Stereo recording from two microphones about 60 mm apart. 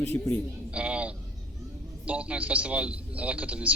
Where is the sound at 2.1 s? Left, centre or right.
Right.